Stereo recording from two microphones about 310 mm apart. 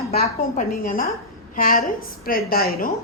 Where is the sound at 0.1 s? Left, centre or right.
Left.